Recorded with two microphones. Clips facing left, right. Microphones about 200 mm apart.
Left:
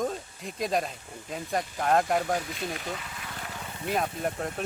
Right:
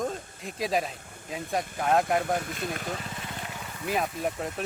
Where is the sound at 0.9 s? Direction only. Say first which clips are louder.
Left 2 dB; 55° right (ahead or behind).